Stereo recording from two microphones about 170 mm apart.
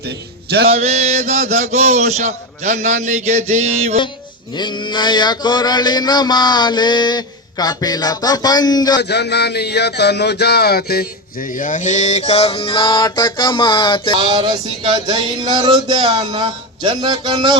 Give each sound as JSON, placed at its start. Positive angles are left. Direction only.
{"t": 0.7, "sound": "speech", "side_deg": -40}
{"t": 4.5, "sound": "mantra", "side_deg": 25}
{"t": 9.0, "sound": "speech", "side_deg": 75}
{"t": 11.6, "sound": "mantra", "side_deg": 50}
{"t": 14.2, "sound": "a sound", "side_deg": -35}